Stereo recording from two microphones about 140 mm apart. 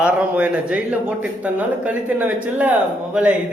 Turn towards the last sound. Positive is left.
turn(degrees=-10)  # may be behind; listen again after turning